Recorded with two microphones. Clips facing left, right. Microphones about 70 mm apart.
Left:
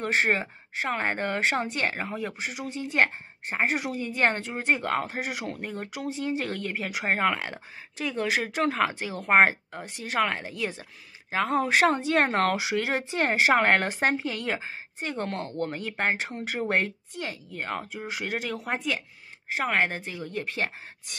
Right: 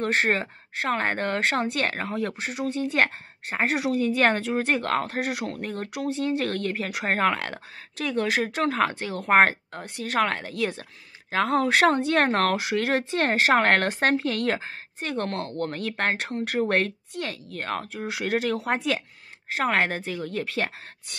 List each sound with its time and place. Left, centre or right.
0.0 s a woman's voice: right
20.2 s speech: right